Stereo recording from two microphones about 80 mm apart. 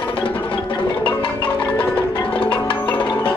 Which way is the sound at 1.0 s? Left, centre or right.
Left.